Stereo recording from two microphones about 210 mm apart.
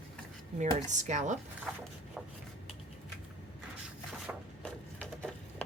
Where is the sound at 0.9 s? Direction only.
35° right (ahead or behind).